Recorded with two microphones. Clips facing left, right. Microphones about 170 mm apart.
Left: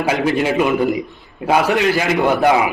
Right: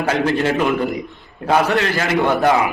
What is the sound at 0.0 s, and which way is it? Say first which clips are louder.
A man's voice: left 1 dB; 10° left (ahead or behind).